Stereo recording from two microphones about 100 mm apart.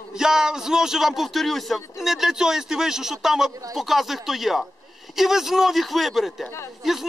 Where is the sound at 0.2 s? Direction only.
5° right (ahead or behind).